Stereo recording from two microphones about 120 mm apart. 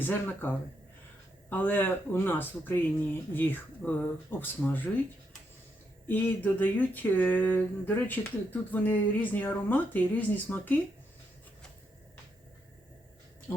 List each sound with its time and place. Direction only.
0.0 s speech: 15° left (ahead or behind)
6.1 s speech: 15° left (ahead or behind)